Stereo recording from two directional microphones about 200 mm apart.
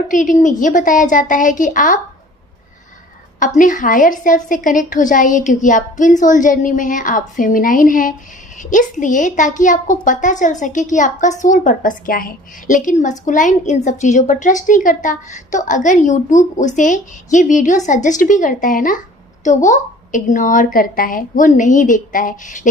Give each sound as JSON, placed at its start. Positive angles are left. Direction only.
{"t": 0.1, "sound": "a woman's voice", "side_deg": 40}
{"t": 3.4, "sound": "a woman's voice", "side_deg": 40}